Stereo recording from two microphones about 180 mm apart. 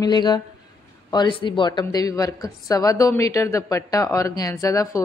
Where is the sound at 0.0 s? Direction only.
25° left (ahead or behind).